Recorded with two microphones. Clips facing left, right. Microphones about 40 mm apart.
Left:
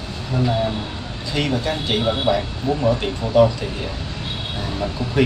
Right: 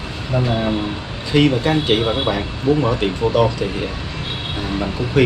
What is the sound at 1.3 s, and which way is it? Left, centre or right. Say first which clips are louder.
Speech: right 7 dB; right.